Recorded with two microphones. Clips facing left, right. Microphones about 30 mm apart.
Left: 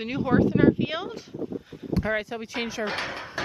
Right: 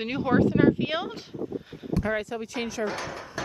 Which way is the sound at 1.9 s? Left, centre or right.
Centre.